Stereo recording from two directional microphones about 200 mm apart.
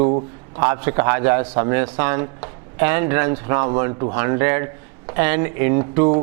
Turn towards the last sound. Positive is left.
turn(degrees=-15)  # may be behind; listen again after turning